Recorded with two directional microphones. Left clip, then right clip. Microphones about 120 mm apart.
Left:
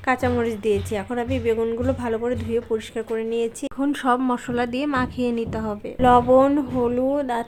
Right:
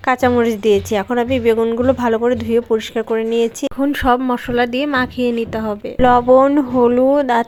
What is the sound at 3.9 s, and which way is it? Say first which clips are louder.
A woman's voice: right 5 dB; 25° right (ahead or behind).